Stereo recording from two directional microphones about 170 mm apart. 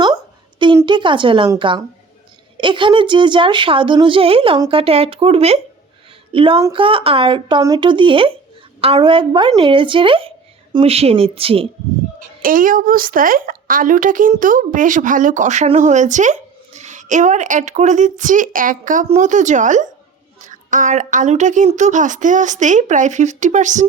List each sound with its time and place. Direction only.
0.9 s a woman's voice: 30° right (ahead or behind)
12.2 s a woman's voice: 55° right (ahead or behind)